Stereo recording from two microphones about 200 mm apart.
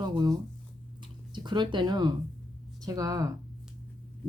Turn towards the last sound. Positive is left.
turn(degrees=-15)  # may be behind; listen again after turning